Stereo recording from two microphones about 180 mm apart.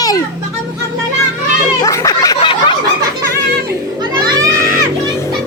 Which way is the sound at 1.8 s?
15° left (ahead or behind).